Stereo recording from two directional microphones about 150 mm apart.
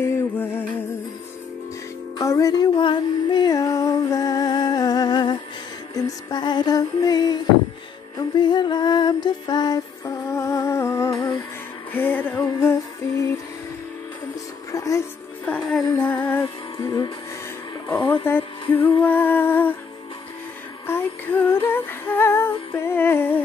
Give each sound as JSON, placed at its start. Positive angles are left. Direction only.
{"t": 0.0, "sound": "music", "side_deg": 15}
{"t": 2.1, "sound": "music", "side_deg": 20}
{"t": 8.4, "sound": "music", "side_deg": 30}
{"t": 14.7, "sound": "music", "side_deg": 20}
{"t": 15.4, "sound": "music", "side_deg": 5}
{"t": 17.8, "sound": "a sound", "side_deg": 30}
{"t": 18.2, "sound": "music", "side_deg": 15}
{"t": 20.8, "sound": "female singing", "side_deg": 15}
{"t": 21.6, "sound": "humming", "side_deg": 15}